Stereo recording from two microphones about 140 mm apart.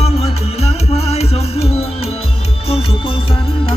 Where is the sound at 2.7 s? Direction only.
40° left (ahead or behind).